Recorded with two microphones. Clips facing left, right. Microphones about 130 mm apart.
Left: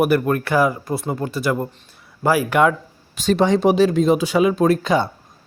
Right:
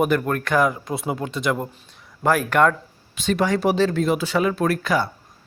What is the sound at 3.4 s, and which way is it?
Speech, 20° left (ahead or behind).